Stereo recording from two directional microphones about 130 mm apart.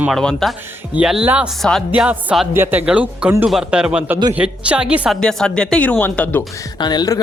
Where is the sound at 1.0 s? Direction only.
5° right (ahead or behind).